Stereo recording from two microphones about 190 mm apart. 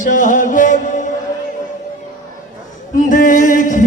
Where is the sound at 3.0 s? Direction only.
45° left (ahead or behind).